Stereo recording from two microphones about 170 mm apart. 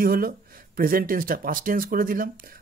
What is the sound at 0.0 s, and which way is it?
Speech, 60° right (ahead or behind).